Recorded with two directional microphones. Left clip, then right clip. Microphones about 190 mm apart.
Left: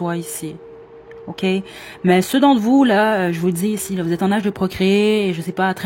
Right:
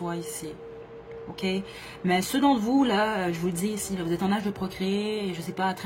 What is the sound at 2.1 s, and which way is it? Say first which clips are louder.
Speech: left 9 dB; 40° left (ahead or behind).